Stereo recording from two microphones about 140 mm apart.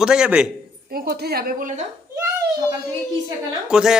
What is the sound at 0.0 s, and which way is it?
Speech, 5° right (ahead or behind).